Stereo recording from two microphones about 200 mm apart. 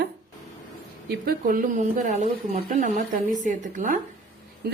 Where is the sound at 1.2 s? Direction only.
45° right (ahead or behind).